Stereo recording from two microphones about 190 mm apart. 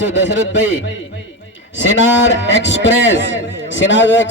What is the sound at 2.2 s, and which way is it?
A man's voice, 70° left (ahead or behind).